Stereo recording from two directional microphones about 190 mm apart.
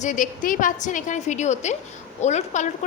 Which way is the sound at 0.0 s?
40° left (ahead or behind).